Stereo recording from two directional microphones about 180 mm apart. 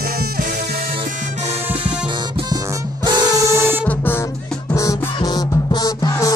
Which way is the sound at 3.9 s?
10° left (ahead or behind).